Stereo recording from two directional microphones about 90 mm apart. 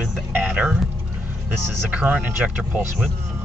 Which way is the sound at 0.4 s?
15° right (ahead or behind).